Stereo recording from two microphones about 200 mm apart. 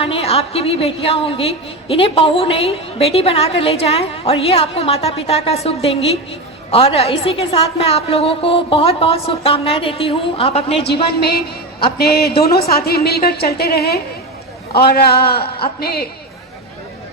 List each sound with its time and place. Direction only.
0.0 s a woman's voice: 30° left (ahead or behind)
11.9 s a woman's voice: 50° left (ahead or behind)